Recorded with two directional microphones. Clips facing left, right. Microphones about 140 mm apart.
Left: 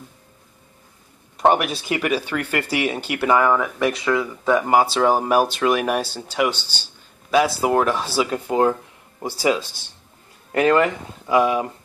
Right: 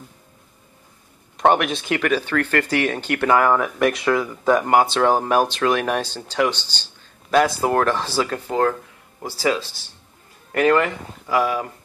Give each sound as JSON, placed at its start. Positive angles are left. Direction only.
{"t": 1.3, "sound": "speech", "side_deg": 5}